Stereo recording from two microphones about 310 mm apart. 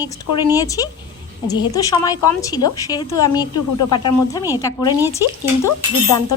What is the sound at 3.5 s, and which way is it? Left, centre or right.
Speech, left.